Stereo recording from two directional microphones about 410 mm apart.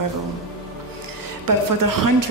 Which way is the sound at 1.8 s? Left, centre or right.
Right.